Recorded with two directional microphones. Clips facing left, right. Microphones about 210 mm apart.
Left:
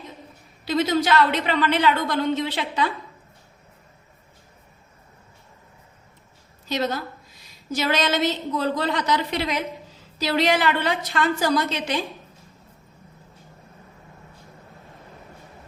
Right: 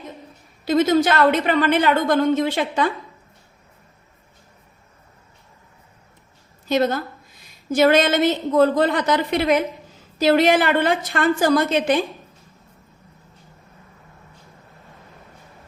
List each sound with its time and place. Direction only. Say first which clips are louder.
0.6 s a woman's voice: right 5 dB; 50° right (ahead or behind)
6.7 s a woman's voice: right 6 dB; 50° right (ahead or behind)